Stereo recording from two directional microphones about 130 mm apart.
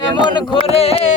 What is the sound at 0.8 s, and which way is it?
Speech, 50° left (ahead or behind).